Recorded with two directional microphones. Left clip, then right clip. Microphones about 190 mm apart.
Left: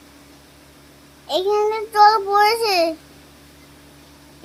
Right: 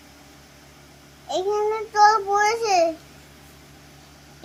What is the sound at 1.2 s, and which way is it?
Child singing, 40° left (ahead or behind).